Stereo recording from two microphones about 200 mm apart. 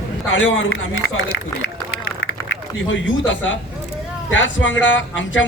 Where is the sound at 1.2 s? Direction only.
70° left (ahead or behind).